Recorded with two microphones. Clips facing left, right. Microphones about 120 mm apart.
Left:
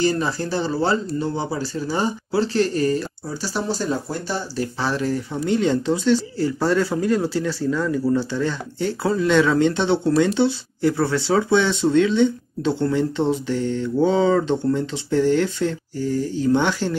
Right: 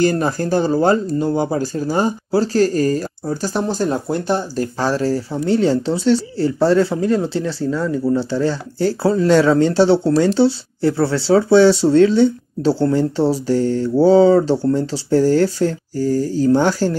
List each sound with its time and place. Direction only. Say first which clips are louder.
0.0 s speech: right 4 dB; 50° right (ahead or behind)